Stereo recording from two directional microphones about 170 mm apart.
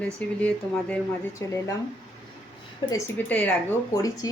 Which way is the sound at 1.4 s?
20° left (ahead or behind).